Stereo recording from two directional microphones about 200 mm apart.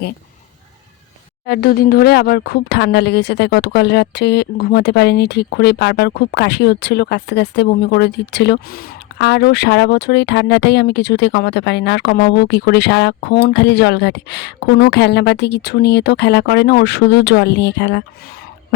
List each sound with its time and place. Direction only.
1.5 s speech: 50° left (ahead or behind)